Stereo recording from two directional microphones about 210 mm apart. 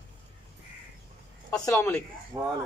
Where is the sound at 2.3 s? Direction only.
15° right (ahead or behind).